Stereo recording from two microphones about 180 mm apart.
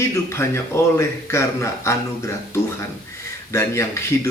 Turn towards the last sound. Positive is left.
turn(degrees=15)  # may be behind; listen again after turning